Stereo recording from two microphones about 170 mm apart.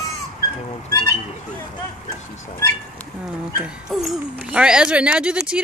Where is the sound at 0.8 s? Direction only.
20° left (ahead or behind).